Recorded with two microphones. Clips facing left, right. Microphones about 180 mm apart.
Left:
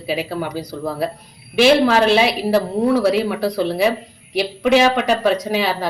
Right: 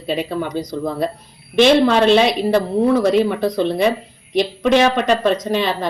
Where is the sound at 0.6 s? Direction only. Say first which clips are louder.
Right 2 dB; 30° left (ahead or behind).